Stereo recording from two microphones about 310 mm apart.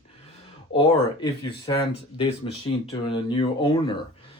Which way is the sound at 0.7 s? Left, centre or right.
Centre.